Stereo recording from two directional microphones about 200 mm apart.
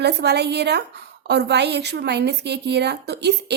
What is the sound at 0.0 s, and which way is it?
A woman's voice, 55° right (ahead or behind).